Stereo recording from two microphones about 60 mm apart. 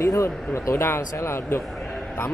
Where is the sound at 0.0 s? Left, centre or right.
Left.